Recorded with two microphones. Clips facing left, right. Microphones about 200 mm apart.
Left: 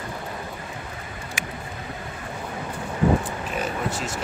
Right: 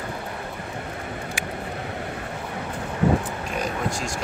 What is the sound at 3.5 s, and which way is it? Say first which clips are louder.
Vehicle: right 1 dB; 5° left (ahead or behind).